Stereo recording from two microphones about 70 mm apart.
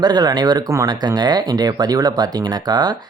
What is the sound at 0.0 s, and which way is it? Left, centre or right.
Speech, right.